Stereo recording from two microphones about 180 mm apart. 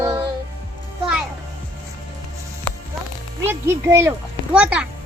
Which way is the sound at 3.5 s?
15° right (ahead or behind).